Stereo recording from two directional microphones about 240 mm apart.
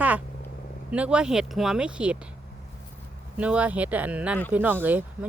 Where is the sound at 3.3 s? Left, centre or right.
Centre.